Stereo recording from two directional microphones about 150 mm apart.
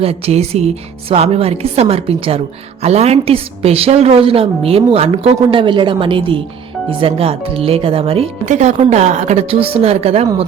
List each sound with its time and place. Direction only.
0.0 s a woman's voice: 40° right (ahead or behind)
8.4 s a woman's voice: 55° right (ahead or behind)